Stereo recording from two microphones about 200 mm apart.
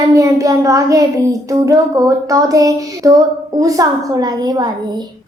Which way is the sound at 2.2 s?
15° right (ahead or behind).